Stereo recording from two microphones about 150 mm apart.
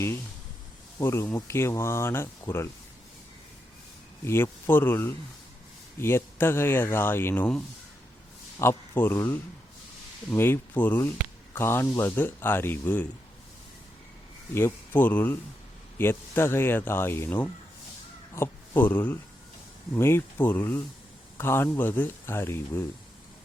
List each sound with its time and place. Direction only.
0.9 s speech: 15° left (ahead or behind)
4.3 s speech: 15° left (ahead or behind)
14.5 s speech: 15° left (ahead or behind)